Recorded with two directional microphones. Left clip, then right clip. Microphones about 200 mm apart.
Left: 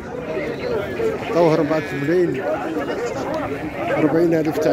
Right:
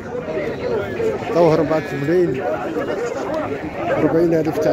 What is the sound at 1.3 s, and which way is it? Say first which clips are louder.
Speech: right 2 dB; centre (ahead or behind).